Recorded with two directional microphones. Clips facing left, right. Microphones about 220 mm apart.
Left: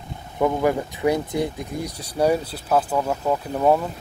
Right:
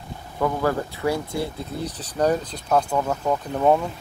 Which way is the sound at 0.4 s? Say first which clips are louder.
Left 2 dB; 15° left (ahead or behind).